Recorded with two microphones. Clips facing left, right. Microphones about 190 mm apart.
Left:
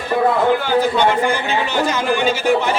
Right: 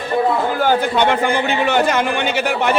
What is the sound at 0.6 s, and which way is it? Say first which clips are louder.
Speech: even; 55° right (ahead or behind).